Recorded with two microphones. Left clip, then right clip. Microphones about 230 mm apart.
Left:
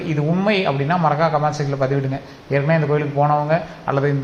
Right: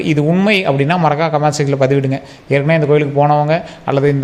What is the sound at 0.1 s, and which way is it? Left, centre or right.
A man's voice, right.